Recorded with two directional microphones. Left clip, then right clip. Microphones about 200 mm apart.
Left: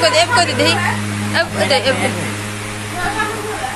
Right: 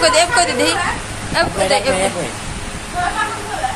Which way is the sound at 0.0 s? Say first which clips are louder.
Even; 10° right (ahead or behind).